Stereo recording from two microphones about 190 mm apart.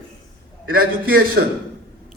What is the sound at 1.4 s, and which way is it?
Speech, 55° right (ahead or behind).